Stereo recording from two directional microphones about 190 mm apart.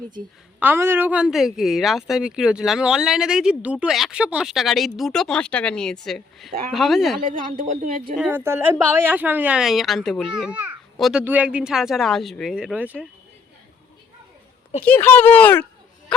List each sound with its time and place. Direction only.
0.6 s speech: 10° right (ahead or behind)
7.3 s speech: 45° right (ahead or behind)
8.1 s speech: 10° right (ahead or behind)
14.8 s speech: 10° left (ahead or behind)